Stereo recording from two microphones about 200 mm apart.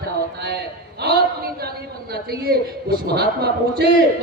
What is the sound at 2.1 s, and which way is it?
A man's voice, 50° right (ahead or behind).